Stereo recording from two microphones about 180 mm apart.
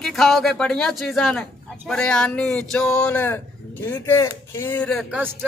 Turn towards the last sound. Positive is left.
turn(degrees=0)  # may be behind; listen again after turning